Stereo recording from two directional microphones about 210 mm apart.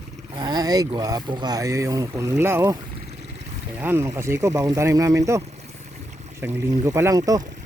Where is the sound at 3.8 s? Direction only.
10° right (ahead or behind).